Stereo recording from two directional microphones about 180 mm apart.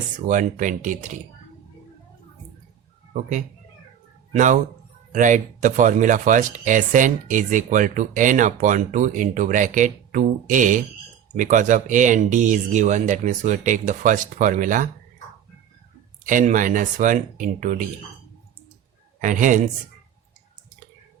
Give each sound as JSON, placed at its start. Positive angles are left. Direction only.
{"t": 0.3, "sound": "speech", "side_deg": -45}
{"t": 3.1, "sound": "a man's voice", "side_deg": -45}
{"t": 16.2, "sound": "speech", "side_deg": -45}
{"t": 19.2, "sound": "speech", "side_deg": -45}